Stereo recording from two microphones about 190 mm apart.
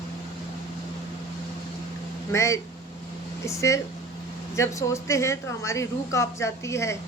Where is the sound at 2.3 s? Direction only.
15° left (ahead or behind).